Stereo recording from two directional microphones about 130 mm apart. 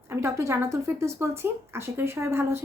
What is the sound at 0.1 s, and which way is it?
A woman's voice, 20° right (ahead or behind).